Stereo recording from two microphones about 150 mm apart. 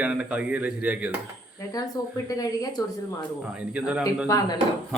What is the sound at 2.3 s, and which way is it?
Speech, 25° left (ahead or behind).